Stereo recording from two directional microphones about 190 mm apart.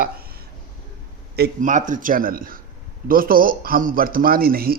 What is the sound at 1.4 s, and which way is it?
Speech, 40° right (ahead or behind).